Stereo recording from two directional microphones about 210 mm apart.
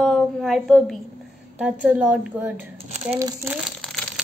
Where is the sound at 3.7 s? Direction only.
Centre (ahead or behind).